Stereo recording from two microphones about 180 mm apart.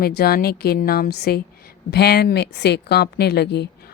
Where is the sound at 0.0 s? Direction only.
60° left (ahead or behind).